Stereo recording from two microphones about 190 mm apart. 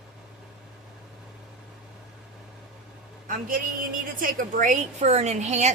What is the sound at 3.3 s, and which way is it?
A woman's voice, 45° right (ahead or behind).